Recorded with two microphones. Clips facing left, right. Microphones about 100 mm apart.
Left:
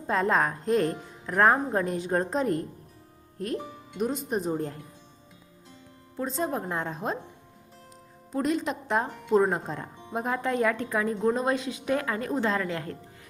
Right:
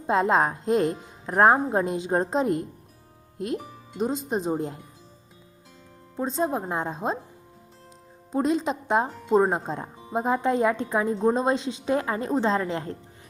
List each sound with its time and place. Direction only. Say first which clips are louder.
0.1 s a woman's voice: right 3 dB; 25° right (ahead or behind)
3.9 s a woman's voice: right 2 dB; 30° right (ahead or behind)
6.1 s a woman's voice: right 3 dB; 20° right (ahead or behind)
8.3 s a woman's voice: right 3 dB; 25° right (ahead or behind)